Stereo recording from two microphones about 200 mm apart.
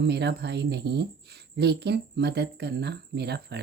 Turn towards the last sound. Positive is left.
turn(degrees=-55)  # may be behind; listen again after turning